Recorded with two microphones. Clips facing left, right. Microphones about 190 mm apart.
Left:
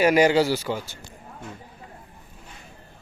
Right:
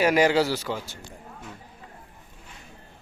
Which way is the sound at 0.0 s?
Centre (ahead or behind).